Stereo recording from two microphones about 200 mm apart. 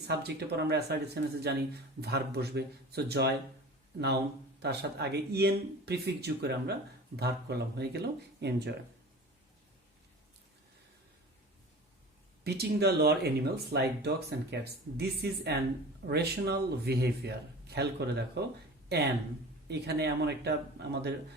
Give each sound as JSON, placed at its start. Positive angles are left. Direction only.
{"t": 0.1, "sound": "speech", "side_deg": -55}
{"t": 4.6, "sound": "speech", "side_deg": -55}
{"t": 12.5, "sound": "speech", "side_deg": -55}
{"t": 19.6, "sound": "speech", "side_deg": -55}